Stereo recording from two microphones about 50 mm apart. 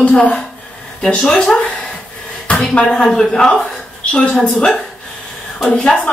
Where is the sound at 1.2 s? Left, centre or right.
Centre.